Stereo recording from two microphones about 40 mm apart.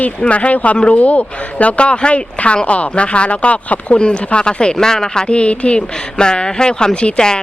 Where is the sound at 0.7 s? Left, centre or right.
Left.